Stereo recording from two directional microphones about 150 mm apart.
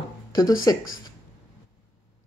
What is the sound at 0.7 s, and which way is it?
Speech, 20° left (ahead or behind).